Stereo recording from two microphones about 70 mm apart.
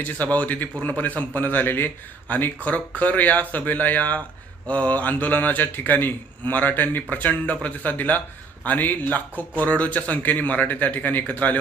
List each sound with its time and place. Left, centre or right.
0.0 s a man's voice: left